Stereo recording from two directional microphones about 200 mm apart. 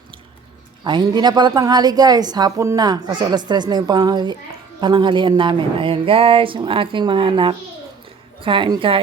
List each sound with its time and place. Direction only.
0.9 s a woman's voice: 20° right (ahead or behind)